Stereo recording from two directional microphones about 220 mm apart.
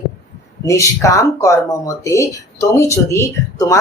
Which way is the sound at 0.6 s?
15° left (ahead or behind).